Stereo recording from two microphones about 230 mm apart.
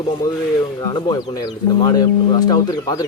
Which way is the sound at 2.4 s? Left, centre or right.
Centre.